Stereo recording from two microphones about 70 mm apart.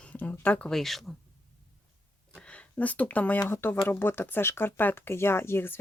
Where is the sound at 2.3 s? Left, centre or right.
Centre.